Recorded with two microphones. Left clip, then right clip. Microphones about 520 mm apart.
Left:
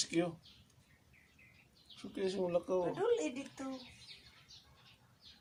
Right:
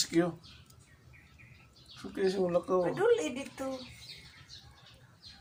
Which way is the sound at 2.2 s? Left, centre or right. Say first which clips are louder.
Right 6 dB; left.